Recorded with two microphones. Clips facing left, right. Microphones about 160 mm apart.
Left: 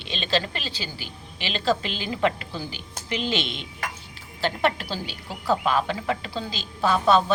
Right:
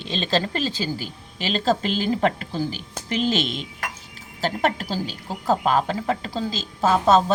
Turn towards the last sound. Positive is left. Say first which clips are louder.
# right 2 dB
turn(degrees=-40)  # may be behind; listen again after turning